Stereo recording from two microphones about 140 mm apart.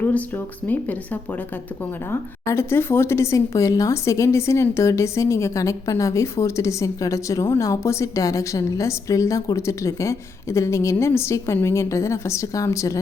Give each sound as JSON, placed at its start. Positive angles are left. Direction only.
{"t": 0.0, "sound": "speech", "side_deg": 10}